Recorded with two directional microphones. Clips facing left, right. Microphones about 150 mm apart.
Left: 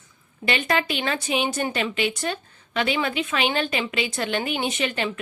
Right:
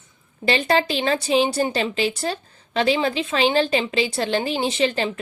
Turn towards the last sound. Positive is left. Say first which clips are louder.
# right 4 dB
turn(degrees=-30)  # may be behind; listen again after turning